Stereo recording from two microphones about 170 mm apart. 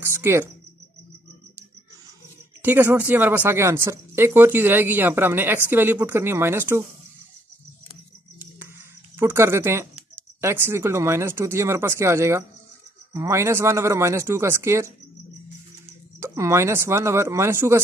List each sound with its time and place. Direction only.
0.0 s speech: 15° right (ahead or behind)
2.6 s speech: 10° right (ahead or behind)
9.1 s speech: 15° right (ahead or behind)
16.2 s speech: 15° right (ahead or behind)